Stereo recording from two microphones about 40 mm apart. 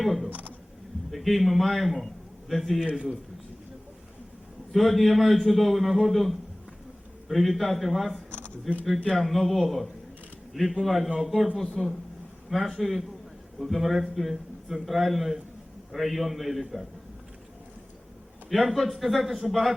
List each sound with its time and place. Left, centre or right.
0.0 s a man's voice: centre
4.7 s a man's voice: centre
8.3 s a sound: left
9.0 s a man's voice: centre
18.4 s a man's voice: centre